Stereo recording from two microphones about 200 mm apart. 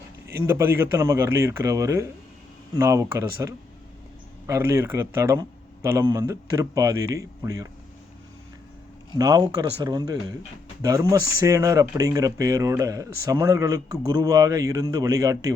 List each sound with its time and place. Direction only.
0.4 s speech: 10° right (ahead or behind)
9.1 s speech: 20° right (ahead or behind)